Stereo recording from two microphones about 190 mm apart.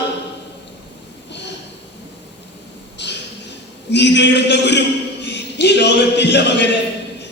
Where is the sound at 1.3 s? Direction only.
65° left (ahead or behind).